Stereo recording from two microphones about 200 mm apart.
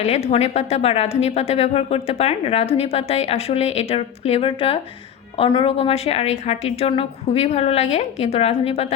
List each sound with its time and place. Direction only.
0.0 s a woman's voice: 35° left (ahead or behind)